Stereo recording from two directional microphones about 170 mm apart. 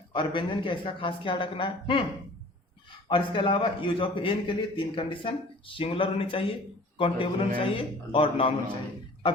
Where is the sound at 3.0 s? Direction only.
30° left (ahead or behind).